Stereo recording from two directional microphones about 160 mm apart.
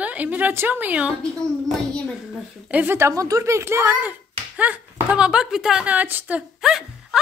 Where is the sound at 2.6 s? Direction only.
10° right (ahead or behind).